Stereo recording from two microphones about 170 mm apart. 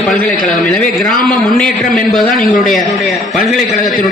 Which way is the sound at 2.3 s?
55° left (ahead or behind).